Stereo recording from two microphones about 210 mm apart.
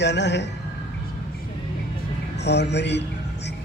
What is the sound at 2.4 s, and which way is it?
Speech, 55° left (ahead or behind).